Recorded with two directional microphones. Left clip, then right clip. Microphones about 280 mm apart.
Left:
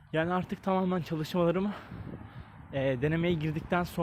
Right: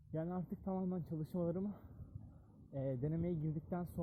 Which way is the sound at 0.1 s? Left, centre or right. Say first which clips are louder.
Left 14 dB; left.